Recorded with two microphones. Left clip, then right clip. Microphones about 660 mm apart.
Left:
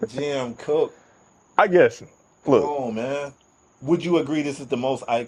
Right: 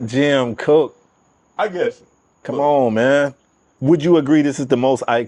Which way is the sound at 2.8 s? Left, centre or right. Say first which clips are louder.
Right 12 dB; right.